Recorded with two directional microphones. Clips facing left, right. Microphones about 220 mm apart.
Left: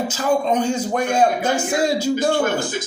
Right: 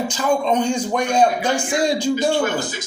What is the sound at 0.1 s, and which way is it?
A man's voice, 5° left (ahead or behind).